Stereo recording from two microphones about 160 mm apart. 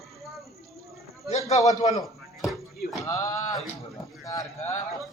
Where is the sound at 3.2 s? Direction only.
20° left (ahead or behind).